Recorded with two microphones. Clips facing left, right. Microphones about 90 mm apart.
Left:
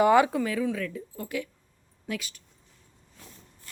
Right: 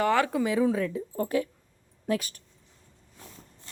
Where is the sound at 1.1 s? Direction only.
40° right (ahead or behind).